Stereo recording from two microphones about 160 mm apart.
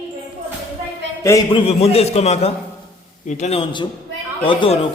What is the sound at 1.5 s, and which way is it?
A man's voice, 35° left (ahead or behind).